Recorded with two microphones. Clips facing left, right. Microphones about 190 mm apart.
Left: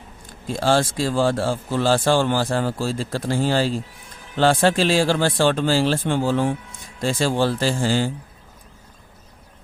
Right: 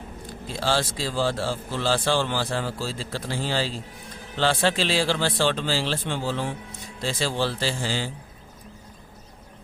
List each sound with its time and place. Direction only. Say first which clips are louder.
0.3 s speech: left 6 dB; 50° left (ahead or behind)